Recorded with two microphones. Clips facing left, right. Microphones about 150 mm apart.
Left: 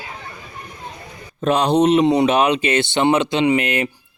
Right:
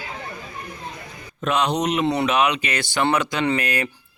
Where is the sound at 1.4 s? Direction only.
35° left (ahead or behind).